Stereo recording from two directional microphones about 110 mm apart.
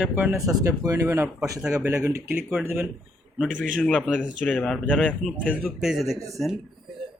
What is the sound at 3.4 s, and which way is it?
Speech, 10° left (ahead or behind).